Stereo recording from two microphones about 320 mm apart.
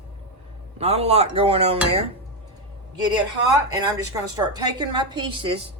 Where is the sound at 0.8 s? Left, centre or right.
Centre.